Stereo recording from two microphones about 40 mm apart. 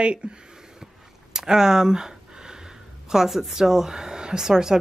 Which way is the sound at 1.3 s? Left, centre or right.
Centre.